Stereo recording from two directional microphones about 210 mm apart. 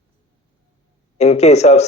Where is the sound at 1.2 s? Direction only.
30° left (ahead or behind).